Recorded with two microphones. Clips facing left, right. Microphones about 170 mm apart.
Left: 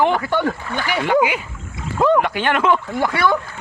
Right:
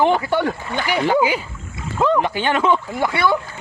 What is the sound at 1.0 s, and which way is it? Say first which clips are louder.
Speech: left 1 dB; 35° right (ahead or behind).